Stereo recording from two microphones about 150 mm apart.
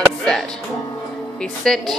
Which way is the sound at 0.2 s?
5° left (ahead or behind).